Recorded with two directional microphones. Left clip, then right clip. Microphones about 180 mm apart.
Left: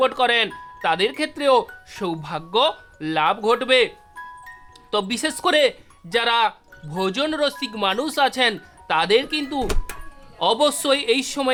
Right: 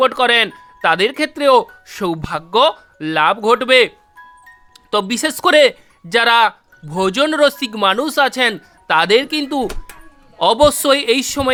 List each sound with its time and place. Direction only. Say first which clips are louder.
0.0 s speech: right 5 dB; 25° right (ahead or behind)
9.6 s music: right 2 dB; centre (ahead or behind)
10.3 s speech: right 7 dB; 30° right (ahead or behind)